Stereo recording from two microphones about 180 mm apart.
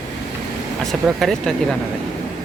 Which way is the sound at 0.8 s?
Centre (ahead or behind).